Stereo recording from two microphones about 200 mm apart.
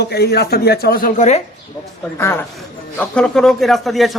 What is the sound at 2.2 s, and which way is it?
A man's voice, 10° left (ahead or behind).